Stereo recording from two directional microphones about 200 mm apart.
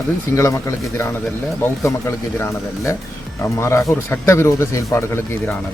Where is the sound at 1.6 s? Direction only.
10° left (ahead or behind).